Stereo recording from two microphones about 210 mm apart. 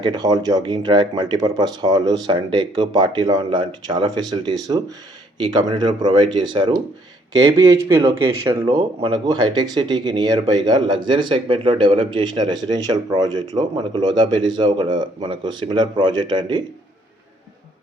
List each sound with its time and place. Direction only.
0.0 s speech: 20° right (ahead or behind)
6.5 s speech: 25° right (ahead or behind)